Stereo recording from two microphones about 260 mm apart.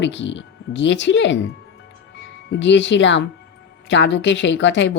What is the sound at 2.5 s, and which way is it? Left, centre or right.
Speech, left.